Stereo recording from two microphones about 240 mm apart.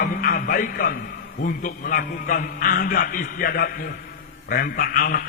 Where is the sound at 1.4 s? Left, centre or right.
Left.